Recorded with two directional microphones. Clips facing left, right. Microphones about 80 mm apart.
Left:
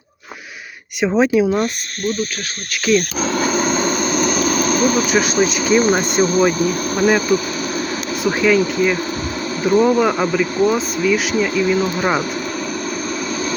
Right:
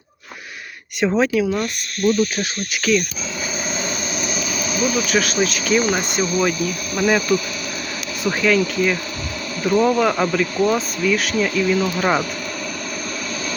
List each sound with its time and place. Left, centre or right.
1.0 s speech: centre
1.3 s speech: left
2.9 s speech: centre
3.3 s vehicle: left
5.1 s speech: left